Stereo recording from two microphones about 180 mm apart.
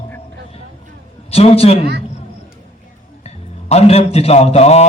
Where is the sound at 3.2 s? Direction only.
35° left (ahead or behind).